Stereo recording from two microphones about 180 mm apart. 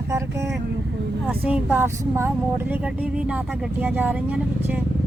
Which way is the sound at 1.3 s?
10° right (ahead or behind).